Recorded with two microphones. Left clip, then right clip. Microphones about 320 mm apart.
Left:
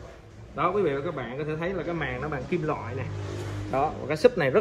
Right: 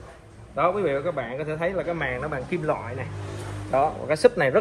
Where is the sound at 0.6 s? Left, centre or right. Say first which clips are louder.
Right 3 dB; centre.